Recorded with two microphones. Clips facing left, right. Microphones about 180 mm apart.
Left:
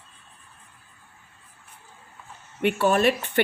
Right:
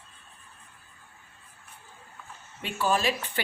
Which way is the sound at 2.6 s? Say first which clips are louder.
Left 7 dB; 60° left (ahead or behind).